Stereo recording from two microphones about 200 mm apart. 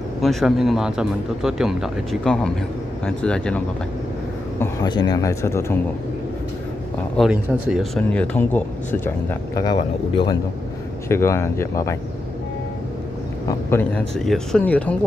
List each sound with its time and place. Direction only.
0.2 s speech: centre (ahead or behind)
4.6 s speech: 20° left (ahead or behind)
7.2 s speech: 5° right (ahead or behind); by 12.0 s 15° left (ahead or behind)
13.5 s speech: 10° left (ahead or behind)